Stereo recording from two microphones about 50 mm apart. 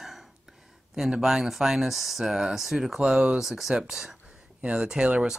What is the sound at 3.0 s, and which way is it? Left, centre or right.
Speech, centre.